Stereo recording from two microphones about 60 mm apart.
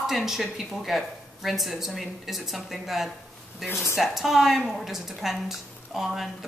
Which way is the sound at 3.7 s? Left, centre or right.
Left.